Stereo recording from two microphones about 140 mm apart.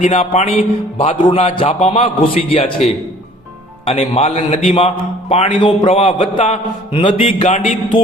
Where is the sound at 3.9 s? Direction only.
45° left (ahead or behind).